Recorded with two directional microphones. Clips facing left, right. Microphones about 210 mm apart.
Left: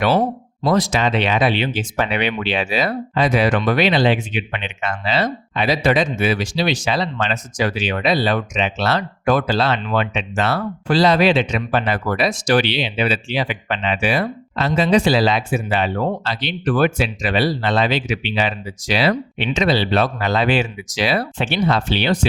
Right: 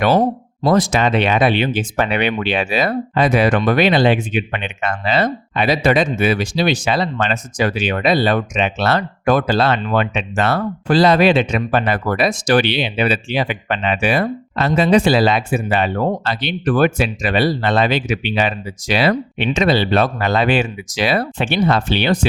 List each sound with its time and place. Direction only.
0.0 s speech: 40° right (ahead or behind)